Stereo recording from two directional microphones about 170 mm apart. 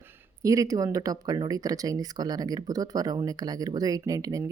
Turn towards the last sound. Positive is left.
turn(degrees=-20)  # may be behind; listen again after turning